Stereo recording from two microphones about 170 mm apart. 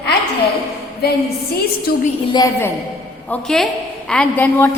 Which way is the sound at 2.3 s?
15° left (ahead or behind).